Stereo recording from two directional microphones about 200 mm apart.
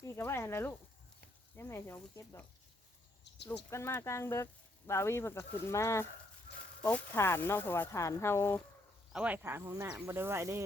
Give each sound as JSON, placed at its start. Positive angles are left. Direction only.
{"t": 0.0, "sound": "speech", "side_deg": 15}
{"t": 3.3, "sound": "cricket", "side_deg": 60}
{"t": 3.7, "sound": "speech", "side_deg": 15}
{"t": 9.1, "sound": "speech", "side_deg": -5}